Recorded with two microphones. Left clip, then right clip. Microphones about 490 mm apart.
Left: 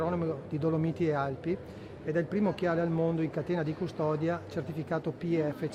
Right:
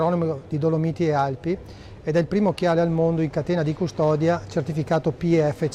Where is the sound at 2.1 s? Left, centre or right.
Right.